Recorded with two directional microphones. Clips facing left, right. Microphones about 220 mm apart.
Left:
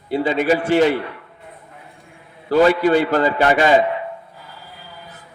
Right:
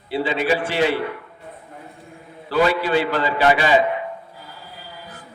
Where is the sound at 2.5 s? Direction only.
45° left (ahead or behind).